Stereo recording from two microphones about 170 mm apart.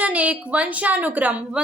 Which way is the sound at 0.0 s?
10° right (ahead or behind).